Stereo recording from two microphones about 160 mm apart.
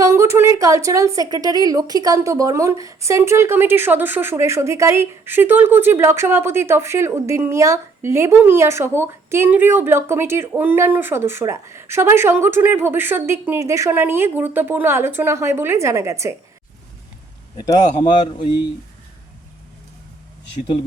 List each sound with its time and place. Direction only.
0.0 s a woman's voice: 15° right (ahead or behind)
17.7 s a man's voice: 30° left (ahead or behind)